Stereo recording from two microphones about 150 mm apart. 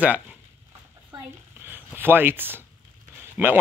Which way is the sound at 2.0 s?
15° right (ahead or behind).